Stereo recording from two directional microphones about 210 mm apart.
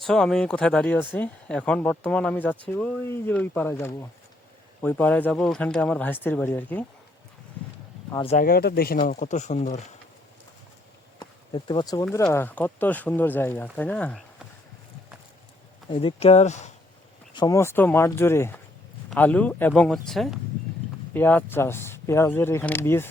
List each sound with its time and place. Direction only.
0.0 s speech: centre (ahead or behind)
8.2 s speech: 30° left (ahead or behind)
8.4 s speech: 45° left (ahead or behind)
11.2 s speech: 20° left (ahead or behind); by 14.2 s 5° left (ahead or behind)
15.9 s speech: 25° left (ahead or behind)
17.3 s speech: 15° left (ahead or behind)